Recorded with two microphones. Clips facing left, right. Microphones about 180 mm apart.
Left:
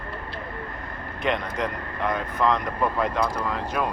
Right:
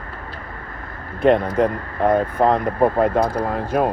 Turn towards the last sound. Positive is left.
turn(degrees=-45)  # may be behind; listen again after turning